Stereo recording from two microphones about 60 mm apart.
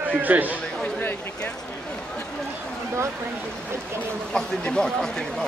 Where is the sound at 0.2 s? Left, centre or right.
Right.